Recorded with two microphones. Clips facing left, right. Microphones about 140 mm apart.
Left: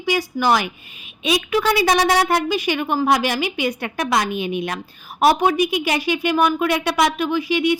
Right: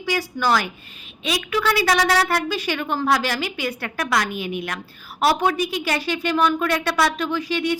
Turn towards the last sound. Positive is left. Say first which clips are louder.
# left 4 dB
turn(degrees=15)  # may be behind; listen again after turning